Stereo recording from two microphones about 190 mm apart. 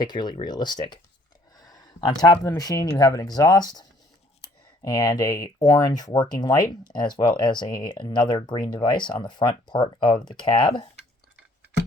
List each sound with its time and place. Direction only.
0.0 s speech: 20° left (ahead or behind)